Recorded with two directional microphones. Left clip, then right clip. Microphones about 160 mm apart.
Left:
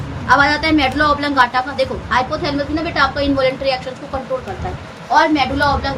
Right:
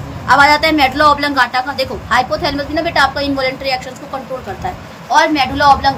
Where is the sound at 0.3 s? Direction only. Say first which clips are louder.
Right 4 dB; 30° right (ahead or behind).